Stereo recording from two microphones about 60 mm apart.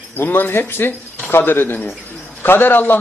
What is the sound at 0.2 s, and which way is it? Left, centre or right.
A man's voice, left.